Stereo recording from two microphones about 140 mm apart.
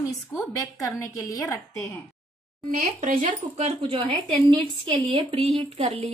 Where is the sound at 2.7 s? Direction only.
90° right.